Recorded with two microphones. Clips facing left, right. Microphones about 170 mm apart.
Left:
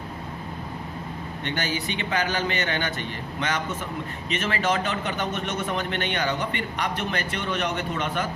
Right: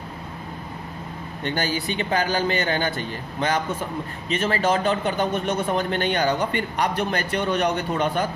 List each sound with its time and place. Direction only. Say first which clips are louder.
1.5 s a man's voice: right 4 dB; 35° right (ahead or behind)